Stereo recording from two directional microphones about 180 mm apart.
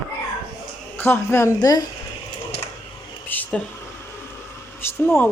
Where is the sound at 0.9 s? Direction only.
10° left (ahead or behind).